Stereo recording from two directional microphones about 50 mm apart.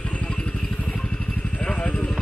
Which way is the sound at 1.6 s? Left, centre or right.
Left.